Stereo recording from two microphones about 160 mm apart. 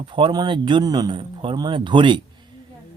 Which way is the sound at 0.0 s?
30° right (ahead or behind).